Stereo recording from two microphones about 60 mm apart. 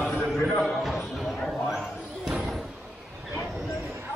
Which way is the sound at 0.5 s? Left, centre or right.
Centre.